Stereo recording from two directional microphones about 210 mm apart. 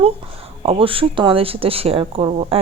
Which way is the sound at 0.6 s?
25° right (ahead or behind).